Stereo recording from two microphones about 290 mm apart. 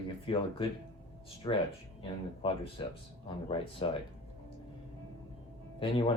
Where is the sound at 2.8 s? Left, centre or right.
Centre.